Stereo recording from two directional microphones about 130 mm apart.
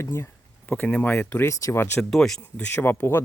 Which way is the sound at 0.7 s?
10° left (ahead or behind).